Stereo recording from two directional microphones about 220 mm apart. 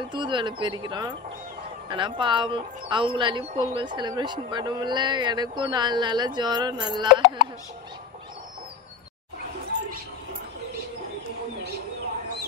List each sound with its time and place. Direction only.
0.1 s a woman's voice: 20° right (ahead or behind)